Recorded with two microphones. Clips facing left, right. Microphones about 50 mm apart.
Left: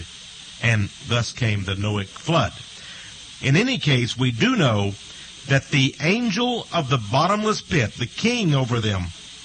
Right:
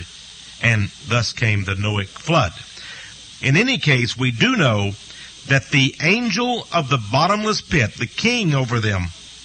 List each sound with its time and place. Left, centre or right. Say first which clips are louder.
0.6 s a man's voice: right 3 dB; right